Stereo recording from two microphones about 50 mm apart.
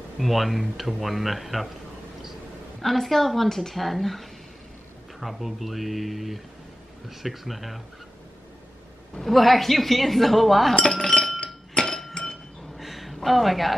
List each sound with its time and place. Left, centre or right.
0.2 s speech: centre
2.8 s speech: centre
9.2 s speech: centre
10.8 s chink: centre
12.7 s a sound: centre